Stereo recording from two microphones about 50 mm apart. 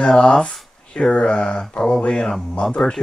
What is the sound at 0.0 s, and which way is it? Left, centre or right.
Speech, centre.